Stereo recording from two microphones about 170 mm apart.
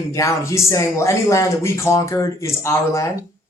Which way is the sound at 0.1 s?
20° left (ahead or behind).